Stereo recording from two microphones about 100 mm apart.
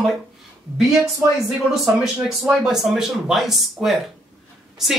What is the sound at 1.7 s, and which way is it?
Speech, 5° right (ahead or behind).